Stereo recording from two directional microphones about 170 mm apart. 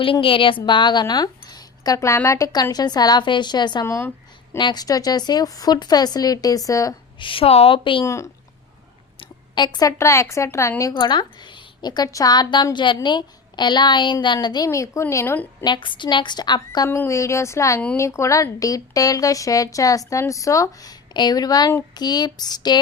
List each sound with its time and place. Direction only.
0.0 s speech: 30° left (ahead or behind)
7.3 s a woman's voice: 35° left (ahead or behind)
8.0 s speech: 20° left (ahead or behind)
15.6 s speech: 30° left (ahead or behind)